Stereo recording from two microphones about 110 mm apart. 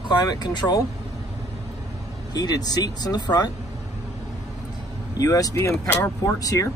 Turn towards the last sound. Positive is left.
turn(degrees=30)  # may be behind; listen again after turning